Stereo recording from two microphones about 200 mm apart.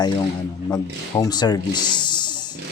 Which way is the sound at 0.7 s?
20° left (ahead or behind).